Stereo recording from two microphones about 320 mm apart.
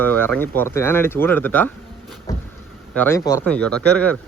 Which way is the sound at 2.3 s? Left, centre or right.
Centre.